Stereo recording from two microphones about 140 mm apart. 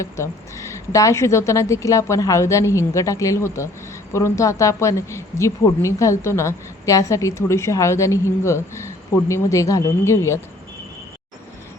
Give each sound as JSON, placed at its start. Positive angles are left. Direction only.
{"t": 0.0, "sound": "a woman's voice", "side_deg": 20}